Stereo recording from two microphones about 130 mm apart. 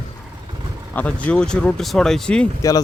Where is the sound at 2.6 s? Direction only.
30° left (ahead or behind).